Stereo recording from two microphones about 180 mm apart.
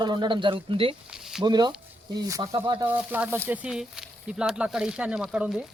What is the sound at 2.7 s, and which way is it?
Speech, 10° right (ahead or behind).